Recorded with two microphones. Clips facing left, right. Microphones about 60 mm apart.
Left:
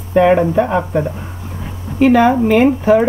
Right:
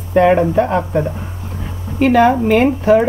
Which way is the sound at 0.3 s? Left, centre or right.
Centre.